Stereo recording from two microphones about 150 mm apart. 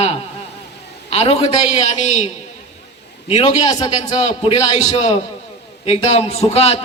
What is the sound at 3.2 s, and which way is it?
A man's voice, 45° left (ahead or behind).